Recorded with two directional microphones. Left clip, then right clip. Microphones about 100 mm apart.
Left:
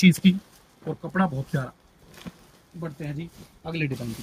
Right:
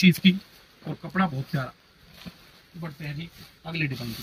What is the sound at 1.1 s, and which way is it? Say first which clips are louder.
Speech: even; 35° left (ahead or behind).